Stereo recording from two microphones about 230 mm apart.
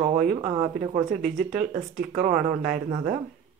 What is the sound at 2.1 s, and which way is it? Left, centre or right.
Speech, right.